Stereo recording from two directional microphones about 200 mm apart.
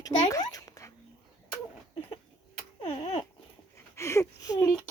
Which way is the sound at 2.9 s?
30° left (ahead or behind).